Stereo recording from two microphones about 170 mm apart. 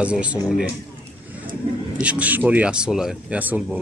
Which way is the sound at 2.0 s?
10° right (ahead or behind).